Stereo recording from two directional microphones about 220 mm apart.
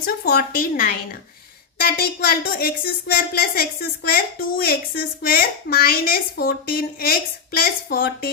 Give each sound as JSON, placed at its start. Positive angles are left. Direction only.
{"t": 0.0, "sound": "speech", "side_deg": 45}